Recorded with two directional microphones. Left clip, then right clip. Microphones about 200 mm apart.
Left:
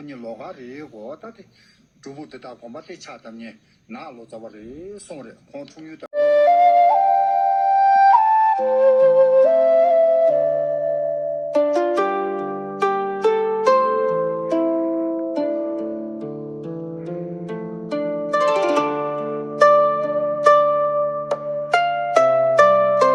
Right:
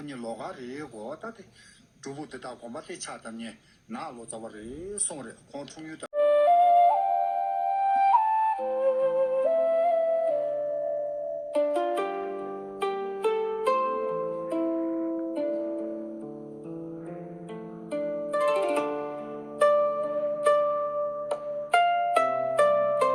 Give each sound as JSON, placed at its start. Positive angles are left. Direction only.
{"t": 6.1, "sound": "flute", "side_deg": 45}
{"t": 11.5, "sound": "music", "side_deg": 45}
{"t": 17.0, "sound": "music", "side_deg": 45}